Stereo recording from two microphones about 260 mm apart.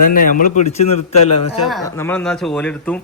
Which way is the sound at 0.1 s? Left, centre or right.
Left.